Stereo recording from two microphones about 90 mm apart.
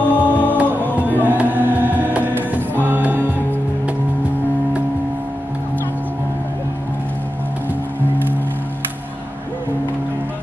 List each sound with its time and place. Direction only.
0.1 s music: 20° left (ahead or behind)
0.6 s music: 20° right (ahead or behind)